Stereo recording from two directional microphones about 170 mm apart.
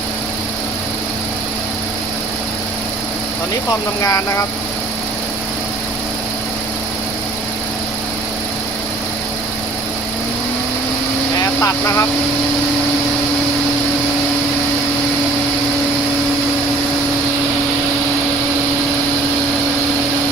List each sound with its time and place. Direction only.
4.0 s speech: 20° left (ahead or behind)
11.6 s speech: 15° left (ahead or behind)